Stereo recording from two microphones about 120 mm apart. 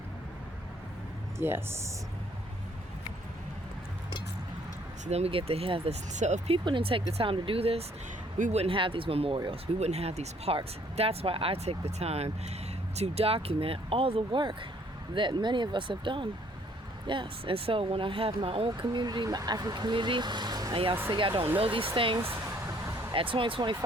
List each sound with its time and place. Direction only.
1.4 s speech: 20° right (ahead or behind)
5.0 s speech: 60° right (ahead or behind)
6.1 s speech: 80° right
6.5 s speech: 45° right (ahead or behind)
8.4 s speech: 90° right
8.6 s speech: 45° right (ahead or behind)
22.2 s vehicle: 20° right (ahead or behind)
23.1 s speech: 45° right (ahead or behind)